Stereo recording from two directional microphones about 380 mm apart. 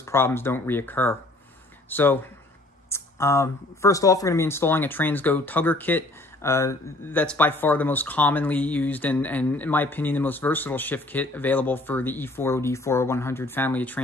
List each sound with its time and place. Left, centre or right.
0.0 s speech: centre